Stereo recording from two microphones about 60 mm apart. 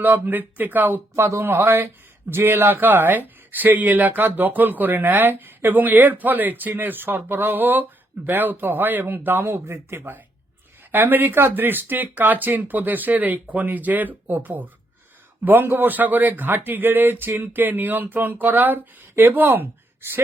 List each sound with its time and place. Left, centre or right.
0.0 s speech: right
1.1 s speech: right